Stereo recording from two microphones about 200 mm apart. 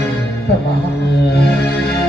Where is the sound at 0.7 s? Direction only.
55° left (ahead or behind).